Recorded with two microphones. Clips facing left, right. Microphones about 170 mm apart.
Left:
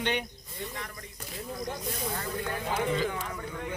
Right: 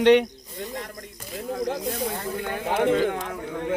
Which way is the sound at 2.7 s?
65° right (ahead or behind).